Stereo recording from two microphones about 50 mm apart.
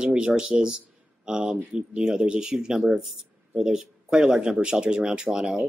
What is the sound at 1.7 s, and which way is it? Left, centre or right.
Speech, centre.